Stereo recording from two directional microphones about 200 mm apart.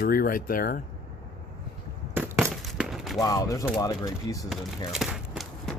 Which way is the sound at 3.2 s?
15° left (ahead or behind).